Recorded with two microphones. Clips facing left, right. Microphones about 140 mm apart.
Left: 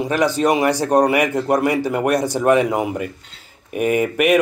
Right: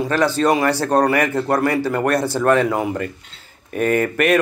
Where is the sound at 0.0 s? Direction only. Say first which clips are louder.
Even; 15° left (ahead or behind).